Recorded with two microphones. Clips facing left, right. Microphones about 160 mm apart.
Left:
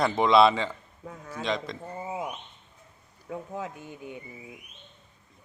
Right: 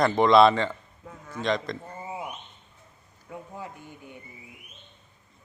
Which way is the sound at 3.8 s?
15° left (ahead or behind).